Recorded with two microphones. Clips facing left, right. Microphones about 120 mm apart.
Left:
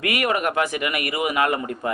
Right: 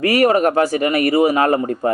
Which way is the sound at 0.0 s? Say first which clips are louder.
Right 9 dB; 35° right (ahead or behind).